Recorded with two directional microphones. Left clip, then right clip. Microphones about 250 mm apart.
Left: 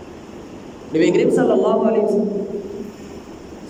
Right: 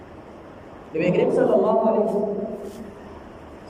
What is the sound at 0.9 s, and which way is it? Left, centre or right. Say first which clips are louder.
Speech: left 5 dB; left.